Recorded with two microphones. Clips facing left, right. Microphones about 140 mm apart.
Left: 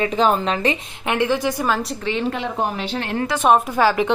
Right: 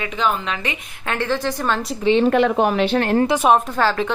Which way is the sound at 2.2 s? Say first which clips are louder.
Right 6 dB; 60° right (ahead or behind).